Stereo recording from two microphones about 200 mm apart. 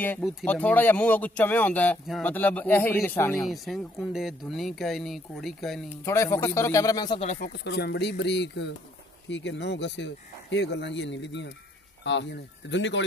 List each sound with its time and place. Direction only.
0.0 s speech: 5° left (ahead or behind)
3.4 s speech: centre (ahead or behind)
6.0 s speech: 15° left (ahead or behind)
7.2 s speech: 45° left (ahead or behind); by 13.0 s 65° left (ahead or behind)